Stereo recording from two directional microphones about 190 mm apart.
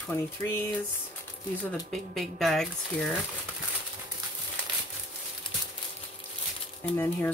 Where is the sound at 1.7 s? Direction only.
Centre (ahead or behind).